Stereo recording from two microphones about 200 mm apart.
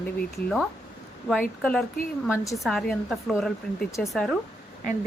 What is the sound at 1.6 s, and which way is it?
Speech, 5° left (ahead or behind).